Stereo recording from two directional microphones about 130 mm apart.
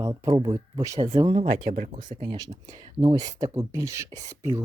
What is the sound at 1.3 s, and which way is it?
Speech, 55° right (ahead or behind).